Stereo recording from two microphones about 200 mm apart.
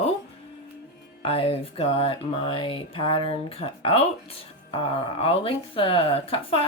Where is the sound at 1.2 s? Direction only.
30° left (ahead or behind).